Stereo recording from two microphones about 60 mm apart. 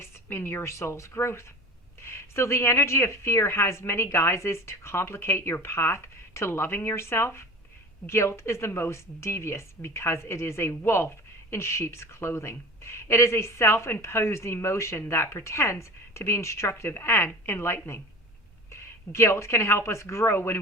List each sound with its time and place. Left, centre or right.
0.0 s a woman's voice: left